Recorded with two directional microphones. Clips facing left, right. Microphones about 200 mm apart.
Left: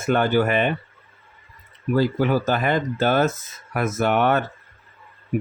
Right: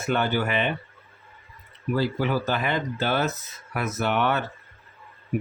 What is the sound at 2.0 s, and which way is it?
Speech, 45° left (ahead or behind).